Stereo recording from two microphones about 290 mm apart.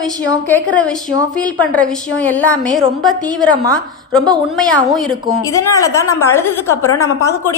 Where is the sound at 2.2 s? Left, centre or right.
Centre.